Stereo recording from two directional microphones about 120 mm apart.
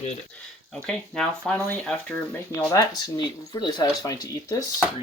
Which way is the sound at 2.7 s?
35° left (ahead or behind).